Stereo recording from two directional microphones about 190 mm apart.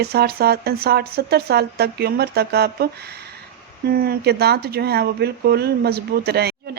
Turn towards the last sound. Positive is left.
turn(degrees=-55)  # may be behind; listen again after turning